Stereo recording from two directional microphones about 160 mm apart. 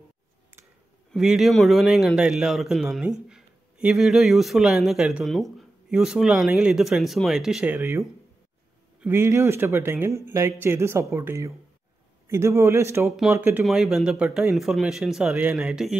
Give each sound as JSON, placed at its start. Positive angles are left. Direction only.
{"t": 1.1, "sound": "speech", "side_deg": -5}
{"t": 9.0, "sound": "speech", "side_deg": -15}
{"t": 13.7, "sound": "speech", "side_deg": 0}